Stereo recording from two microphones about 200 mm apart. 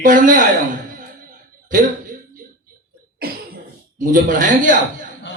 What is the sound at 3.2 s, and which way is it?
Cough, 50° right (ahead or behind).